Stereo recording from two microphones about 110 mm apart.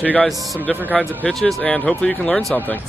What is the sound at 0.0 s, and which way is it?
Speech, 15° left (ahead or behind).